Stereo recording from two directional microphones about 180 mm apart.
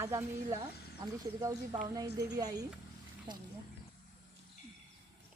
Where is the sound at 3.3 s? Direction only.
25° right (ahead or behind).